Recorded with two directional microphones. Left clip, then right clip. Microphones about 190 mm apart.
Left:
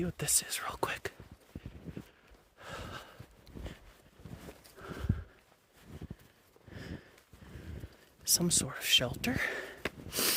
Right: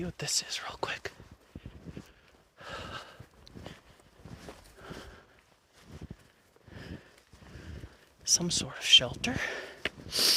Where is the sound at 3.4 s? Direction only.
25° left (ahead or behind).